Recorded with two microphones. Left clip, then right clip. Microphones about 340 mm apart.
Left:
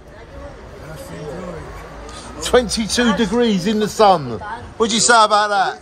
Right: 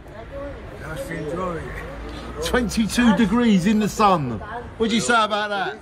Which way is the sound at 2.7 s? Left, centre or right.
Centre.